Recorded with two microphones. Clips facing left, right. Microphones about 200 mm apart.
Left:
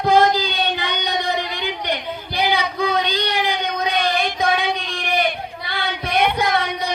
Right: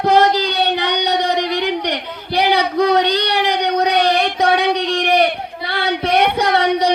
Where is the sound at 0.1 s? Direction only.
70° right (ahead or behind).